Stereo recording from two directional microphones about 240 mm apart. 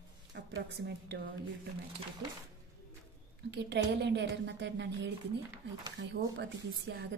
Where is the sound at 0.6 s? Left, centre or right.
Right.